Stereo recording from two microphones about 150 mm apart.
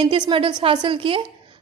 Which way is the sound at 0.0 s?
35° right (ahead or behind).